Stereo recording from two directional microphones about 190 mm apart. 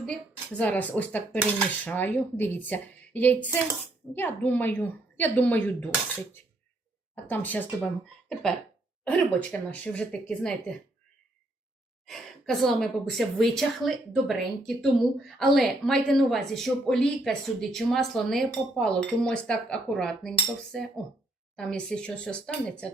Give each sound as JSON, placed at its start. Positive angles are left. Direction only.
{"t": 0.0, "sound": "a woman's voice", "side_deg": 5}
{"t": 7.3, "sound": "a woman's voice", "side_deg": 10}
{"t": 12.0, "sound": "a woman's voice", "side_deg": 0}